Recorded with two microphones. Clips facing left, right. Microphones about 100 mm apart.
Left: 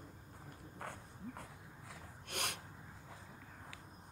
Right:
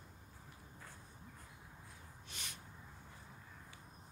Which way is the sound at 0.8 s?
60° left (ahead or behind).